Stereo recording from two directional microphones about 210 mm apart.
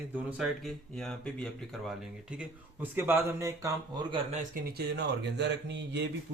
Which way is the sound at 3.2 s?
15° right (ahead or behind).